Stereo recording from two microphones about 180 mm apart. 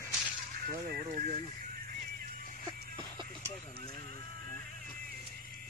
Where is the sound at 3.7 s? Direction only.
55° right (ahead or behind).